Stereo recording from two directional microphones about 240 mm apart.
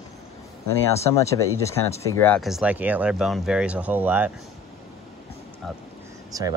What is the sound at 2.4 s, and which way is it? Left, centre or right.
Speech, centre.